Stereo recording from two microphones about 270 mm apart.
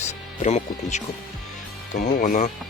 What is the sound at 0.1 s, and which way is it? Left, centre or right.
Speech, left.